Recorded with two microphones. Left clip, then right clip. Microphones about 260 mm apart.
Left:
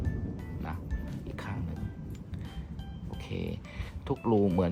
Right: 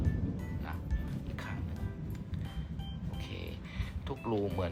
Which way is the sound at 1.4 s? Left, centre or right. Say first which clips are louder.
Left 3 dB; left.